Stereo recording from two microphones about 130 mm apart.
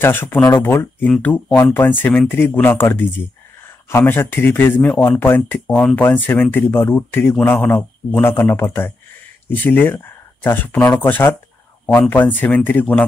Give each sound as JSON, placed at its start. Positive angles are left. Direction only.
{"t": 0.0, "sound": "speech", "side_deg": 15}